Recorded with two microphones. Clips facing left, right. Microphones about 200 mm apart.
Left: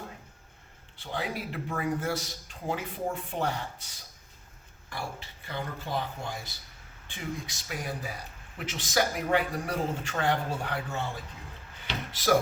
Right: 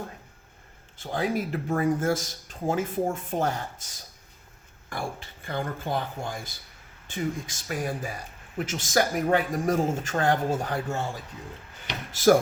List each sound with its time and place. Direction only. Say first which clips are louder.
0.9 s speech: right 7 dB; 45° right (ahead or behind)
12.1 s speech: right 6 dB; 45° right (ahead or behind)